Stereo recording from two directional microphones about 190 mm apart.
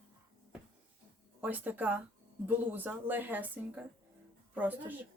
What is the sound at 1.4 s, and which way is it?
Speech, 10° right (ahead or behind).